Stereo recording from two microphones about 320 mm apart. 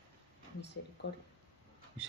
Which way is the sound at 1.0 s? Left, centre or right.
Left.